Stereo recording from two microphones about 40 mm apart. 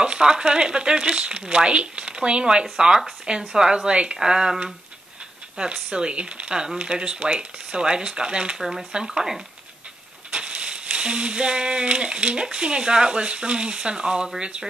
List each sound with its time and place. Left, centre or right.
0.0 s speech: right
8.5 s speech: centre
8.9 s speech: centre
10.3 s speech: right